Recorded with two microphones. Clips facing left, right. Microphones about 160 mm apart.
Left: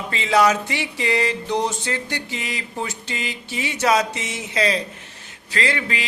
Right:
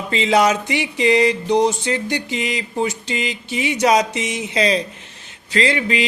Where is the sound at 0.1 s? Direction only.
20° right (ahead or behind).